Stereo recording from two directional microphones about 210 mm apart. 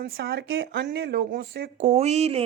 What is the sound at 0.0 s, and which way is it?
Speech, 50° right (ahead or behind).